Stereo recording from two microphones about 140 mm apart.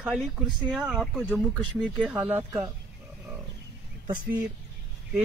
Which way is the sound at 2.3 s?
15° right (ahead or behind).